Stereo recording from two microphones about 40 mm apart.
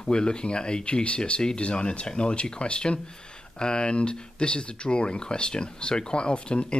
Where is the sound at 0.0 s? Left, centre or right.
Left.